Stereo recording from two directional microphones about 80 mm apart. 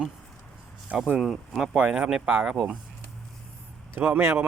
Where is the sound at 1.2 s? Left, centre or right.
Centre.